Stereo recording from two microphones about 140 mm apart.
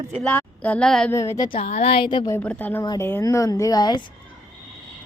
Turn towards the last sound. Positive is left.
turn(degrees=30)  # may be behind; listen again after turning